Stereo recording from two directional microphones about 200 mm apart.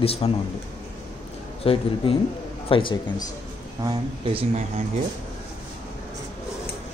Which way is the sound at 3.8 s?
25° right (ahead or behind).